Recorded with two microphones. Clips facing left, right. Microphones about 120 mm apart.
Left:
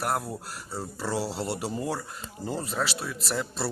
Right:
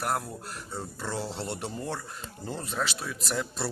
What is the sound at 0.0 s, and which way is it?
Speech, 5° left (ahead or behind).